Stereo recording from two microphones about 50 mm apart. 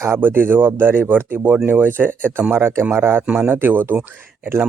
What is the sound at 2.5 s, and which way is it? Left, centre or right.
Speech, right.